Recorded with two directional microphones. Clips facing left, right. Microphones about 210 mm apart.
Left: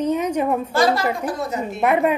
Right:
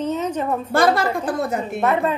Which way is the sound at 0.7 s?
55° right (ahead or behind).